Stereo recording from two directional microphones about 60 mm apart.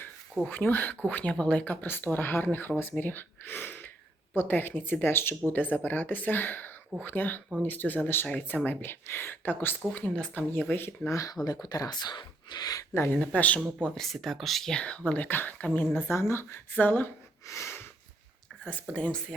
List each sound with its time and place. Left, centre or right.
0.4 s speech: left
11.1 s speech: left
11.6 s speech: left
12.9 s speech: left
13.1 s speech: left
13.9 s speech: centre
14.8 s speech: centre
15.0 s speech: left
16.0 s speech: left
16.7 s speech: left
17.5 s sniff: left
18.7 s speech: left